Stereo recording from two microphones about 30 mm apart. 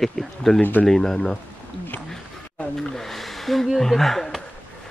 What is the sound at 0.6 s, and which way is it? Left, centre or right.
Speech, left.